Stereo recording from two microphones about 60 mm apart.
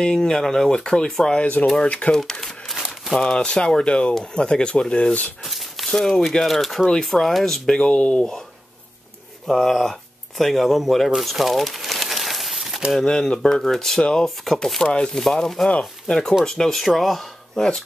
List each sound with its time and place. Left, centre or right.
0.0 s speech: centre
1.4 s speech: left; by 2.8 s centre
2.8 s crumpling: centre
3.2 s speech: centre
5.4 s speech: centre
9.5 s speech: centre
11.1 s crumpling: centre
13.0 s speech: centre